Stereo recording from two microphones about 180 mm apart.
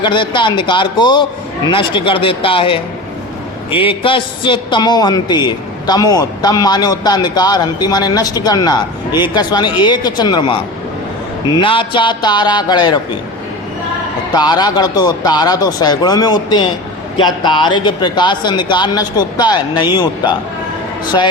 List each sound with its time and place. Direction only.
0.0 s a man's voice: 25° left (ahead or behind)
14.3 s a man's voice: 25° left (ahead or behind)